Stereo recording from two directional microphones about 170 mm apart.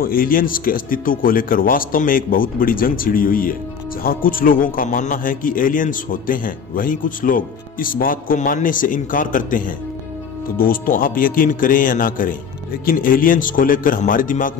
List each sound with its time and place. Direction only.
0.0 s a man's voice: 60° left (ahead or behind)